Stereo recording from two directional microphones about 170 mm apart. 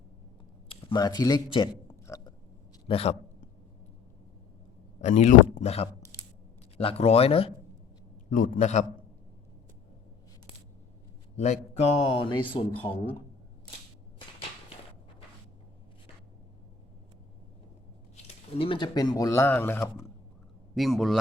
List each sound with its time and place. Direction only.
0.7 s speech: 25° left (ahead or behind)
2.0 s a sound: 20° left (ahead or behind)
2.8 s a man's voice: 35° left (ahead or behind)
4.9 s a man's voice: 40° left (ahead or behind)
8.3 s speech: 50° left (ahead or behind)
11.3 s a man's voice: 40° left (ahead or behind)
18.5 s speech: 30° left (ahead or behind); by 19.9 s 10° left (ahead or behind)
20.7 s a man's voice: centre (ahead or behind)